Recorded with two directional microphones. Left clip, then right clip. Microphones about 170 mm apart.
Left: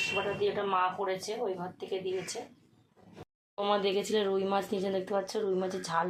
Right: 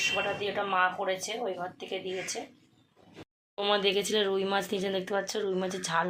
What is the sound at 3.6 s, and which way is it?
A woman's voice, 5° left (ahead or behind).